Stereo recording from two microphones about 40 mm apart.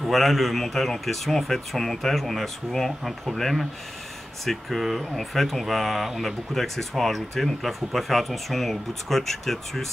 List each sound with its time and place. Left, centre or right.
0.0 s speech: centre